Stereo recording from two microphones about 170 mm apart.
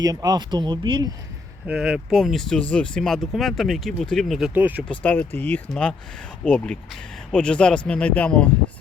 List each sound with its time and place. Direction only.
0.0 s speech: 20° right (ahead or behind)
1.6 s speech: 5° right (ahead or behind)
4.9 s speech: 10° left (ahead or behind)